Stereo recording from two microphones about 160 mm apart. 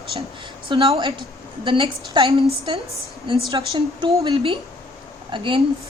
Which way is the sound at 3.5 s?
30° right (ahead or behind).